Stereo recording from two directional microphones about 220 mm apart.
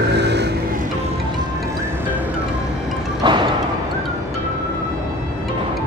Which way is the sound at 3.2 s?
20° right (ahead or behind).